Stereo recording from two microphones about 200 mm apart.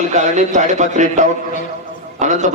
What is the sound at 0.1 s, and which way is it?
A man's voice, 35° right (ahead or behind).